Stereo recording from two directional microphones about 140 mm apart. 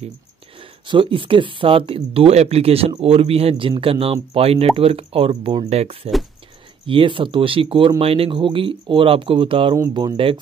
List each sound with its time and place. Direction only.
0.6 s speech: 40° right (ahead or behind)